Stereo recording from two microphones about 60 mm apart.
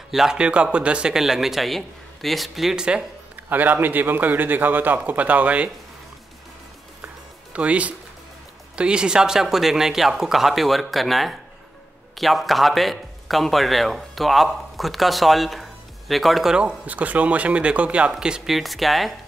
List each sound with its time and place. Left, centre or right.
0.1 s speech: centre
0.4 s a man's voice: centre
2.7 s a man's voice: centre
3.4 s a man's voice: right
7.5 s a man's voice: right; by 16.5 s centre
16.5 s speech: right
18.5 s speech: centre